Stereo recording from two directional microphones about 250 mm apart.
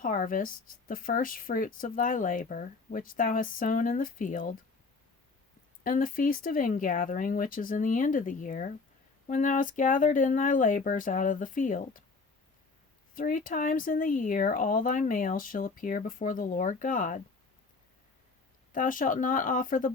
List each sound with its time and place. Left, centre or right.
0.0 s speech: left
5.8 s speech: left
13.1 s speech: left
18.7 s speech: left